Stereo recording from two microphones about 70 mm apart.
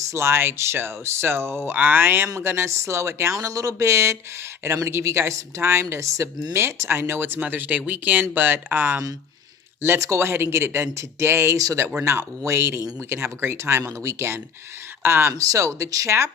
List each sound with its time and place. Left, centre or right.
0.1 s speech: right
3.3 s speech: right
10.0 s speech: right
11.5 s speech: right
12.4 s speech: right
15.4 s speech: right